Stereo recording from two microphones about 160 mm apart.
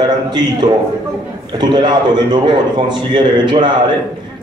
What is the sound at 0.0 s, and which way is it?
A man's voice, 25° right (ahead or behind).